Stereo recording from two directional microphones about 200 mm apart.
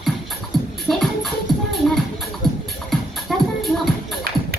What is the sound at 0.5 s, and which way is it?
Music, centre (ahead or behind).